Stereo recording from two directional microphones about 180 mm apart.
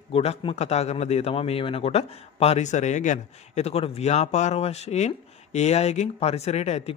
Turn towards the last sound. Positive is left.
turn(degrees=35)  # may be behind; listen again after turning